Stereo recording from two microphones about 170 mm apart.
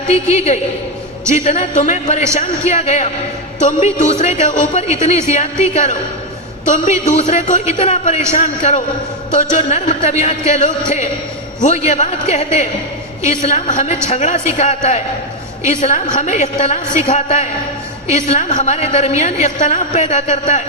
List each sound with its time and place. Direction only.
0.3 s a woman's voice: 40° left (ahead or behind)